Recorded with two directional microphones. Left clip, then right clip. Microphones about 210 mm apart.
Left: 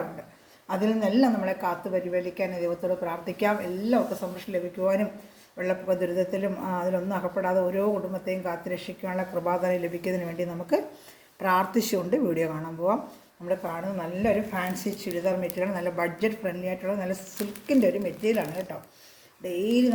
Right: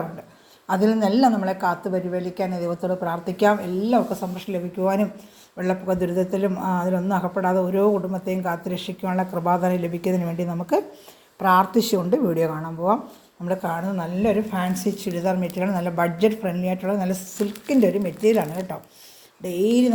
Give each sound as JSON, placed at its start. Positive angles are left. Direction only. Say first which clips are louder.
{"t": 0.7, "sound": "a woman's voice", "louder": "right 5 dB", "side_deg": -35}
{"t": 13.5, "sound": "a woman's voice", "louder": "right 4 dB", "side_deg": -40}
{"t": 14.7, "sound": "speech", "louder": "right 6 dB", "side_deg": 0}
{"t": 15.0, "sound": "a woman's voice", "louder": "right 1 dB", "side_deg": -40}